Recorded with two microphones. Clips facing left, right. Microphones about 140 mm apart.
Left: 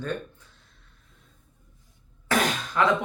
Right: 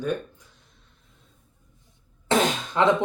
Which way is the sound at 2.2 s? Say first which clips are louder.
Right 3 dB; 25° right (ahead or behind).